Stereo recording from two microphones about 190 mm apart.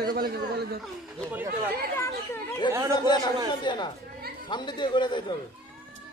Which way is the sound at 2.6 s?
25° left (ahead or behind).